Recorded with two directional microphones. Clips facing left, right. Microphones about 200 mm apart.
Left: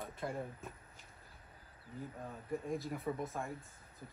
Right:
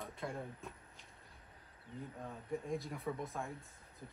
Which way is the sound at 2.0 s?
Centre (ahead or behind).